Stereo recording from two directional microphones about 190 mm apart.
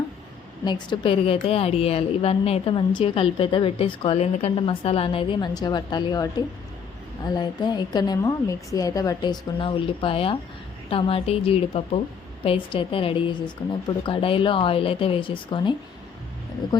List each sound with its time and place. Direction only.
0.6 s a woman's voice: 25° left (ahead or behind)
7.3 s a woman's voice: 20° left (ahead or behind)